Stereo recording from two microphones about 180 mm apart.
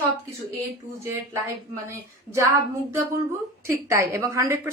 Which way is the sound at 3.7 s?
15° right (ahead or behind).